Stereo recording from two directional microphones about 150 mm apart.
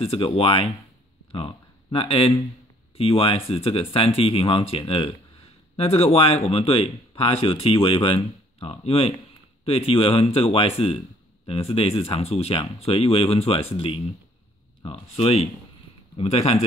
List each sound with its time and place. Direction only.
0.0 s speech: 40° left (ahead or behind)